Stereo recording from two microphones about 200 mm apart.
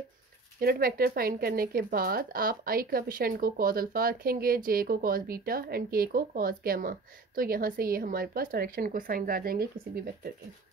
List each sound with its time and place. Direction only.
0.6 s speech: 45° right (ahead or behind)